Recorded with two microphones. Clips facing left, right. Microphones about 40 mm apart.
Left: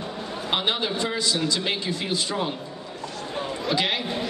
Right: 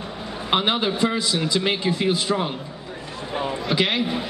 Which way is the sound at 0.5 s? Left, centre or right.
Centre.